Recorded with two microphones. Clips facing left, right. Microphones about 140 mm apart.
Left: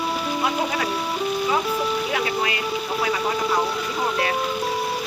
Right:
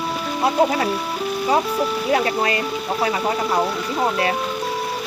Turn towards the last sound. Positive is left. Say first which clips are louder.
# right 2 dB
turn(degrees=-30)  # may be behind; listen again after turning